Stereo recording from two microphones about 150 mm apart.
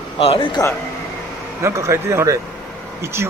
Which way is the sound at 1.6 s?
20° right (ahead or behind).